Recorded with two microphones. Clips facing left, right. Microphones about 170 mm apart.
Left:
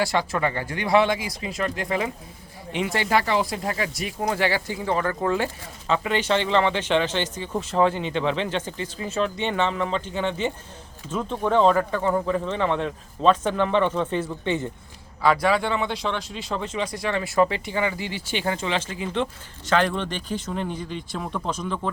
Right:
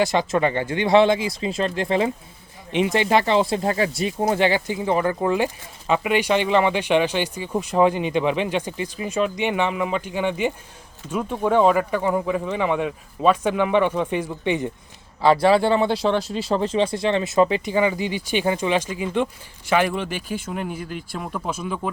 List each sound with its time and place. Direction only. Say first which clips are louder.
0.0 s speech: right 4 dB; 20° right (ahead or behind)
15.2 s speech: right 5 dB; 30° right (ahead or behind); by 21.8 s 10° right (ahead or behind)